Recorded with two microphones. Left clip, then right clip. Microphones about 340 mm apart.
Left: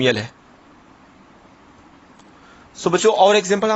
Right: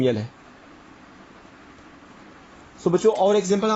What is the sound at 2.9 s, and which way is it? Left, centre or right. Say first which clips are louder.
Speech: left 5 dB; left.